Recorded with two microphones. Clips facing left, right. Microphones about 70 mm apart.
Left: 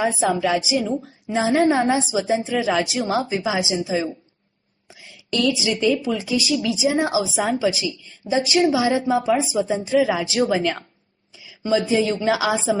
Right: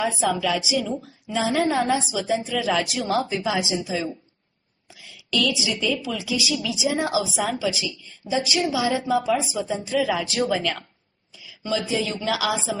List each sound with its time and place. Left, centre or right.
0.0 s a woman's voice: left
5.3 s speech: left